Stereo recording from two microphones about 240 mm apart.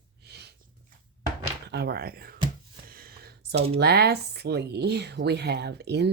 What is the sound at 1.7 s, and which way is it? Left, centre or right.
Speech, right.